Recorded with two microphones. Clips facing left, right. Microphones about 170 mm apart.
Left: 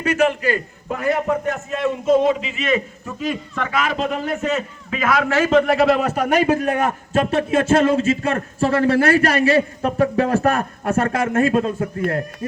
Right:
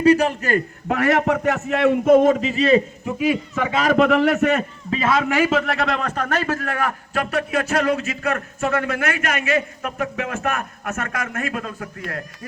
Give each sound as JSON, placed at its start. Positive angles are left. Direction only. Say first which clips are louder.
{"t": 0.0, "sound": "a man's voice", "louder": "right 2 dB", "side_deg": -35}
{"t": 0.9, "sound": "a man's voice", "louder": "right 1 dB", "side_deg": -80}
{"t": 3.1, "sound": "speech", "louder": "right 4 dB", "side_deg": -10}
{"t": 3.9, "sound": "a man's voice", "louder": "right 7 dB", "side_deg": -70}
{"t": 4.9, "sound": "a man's voice", "louder": "even", "side_deg": -30}
{"t": 5.3, "sound": "a man's voice", "louder": "left 4 dB", "side_deg": -10}